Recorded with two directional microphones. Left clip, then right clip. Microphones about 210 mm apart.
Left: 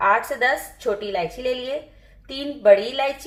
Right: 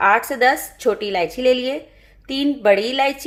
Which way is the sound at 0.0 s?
55° right (ahead or behind).